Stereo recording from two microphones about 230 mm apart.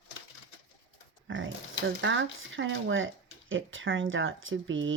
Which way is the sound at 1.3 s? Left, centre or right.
Right.